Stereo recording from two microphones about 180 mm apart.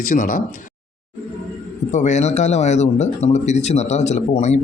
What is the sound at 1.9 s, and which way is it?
Speech, 40° left (ahead or behind).